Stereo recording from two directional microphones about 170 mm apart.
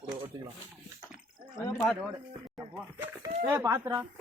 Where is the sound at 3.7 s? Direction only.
15° right (ahead or behind).